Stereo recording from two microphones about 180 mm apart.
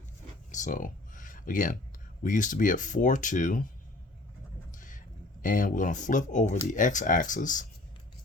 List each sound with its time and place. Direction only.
0.5 s a sound: 45° left (ahead or behind)
2.2 s speech: 45° left (ahead or behind)
4.7 s speech: 45° left (ahead or behind)